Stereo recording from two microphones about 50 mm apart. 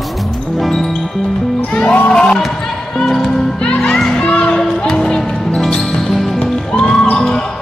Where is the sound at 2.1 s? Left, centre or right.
Centre.